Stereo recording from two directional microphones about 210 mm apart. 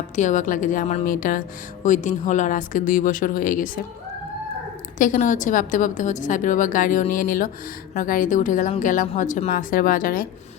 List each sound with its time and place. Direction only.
0.2 s a woman's voice: 35° left (ahead or behind)
4.9 s a woman's voice: 40° left (ahead or behind)